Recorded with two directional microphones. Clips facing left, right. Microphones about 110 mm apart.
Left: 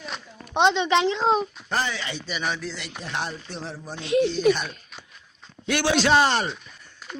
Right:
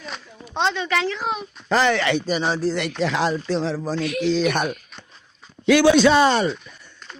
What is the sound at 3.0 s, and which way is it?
Speech, 90° right.